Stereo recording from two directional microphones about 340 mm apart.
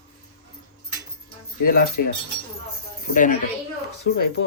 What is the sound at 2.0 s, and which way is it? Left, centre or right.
Speech, left.